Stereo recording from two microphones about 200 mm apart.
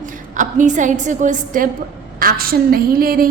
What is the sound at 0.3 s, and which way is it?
A woman's voice, 40° right (ahead or behind).